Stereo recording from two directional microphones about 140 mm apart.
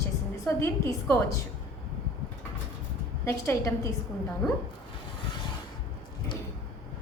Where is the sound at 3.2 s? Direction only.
20° left (ahead or behind).